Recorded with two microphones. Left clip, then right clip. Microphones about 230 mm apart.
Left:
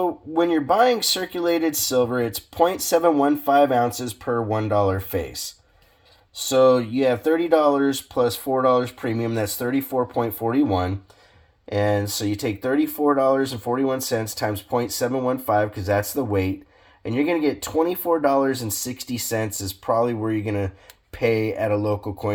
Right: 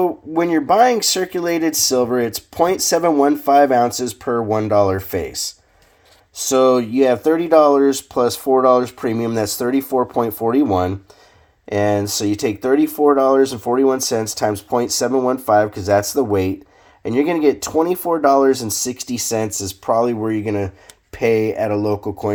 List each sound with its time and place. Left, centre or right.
0.0 s speech: right
6.5 s speech: right